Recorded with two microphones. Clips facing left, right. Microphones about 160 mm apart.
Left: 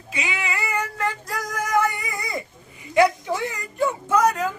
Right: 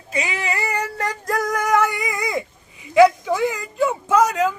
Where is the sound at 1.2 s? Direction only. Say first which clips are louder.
Right 7 dB; 55° right (ahead or behind); by 2.4 s 90° right.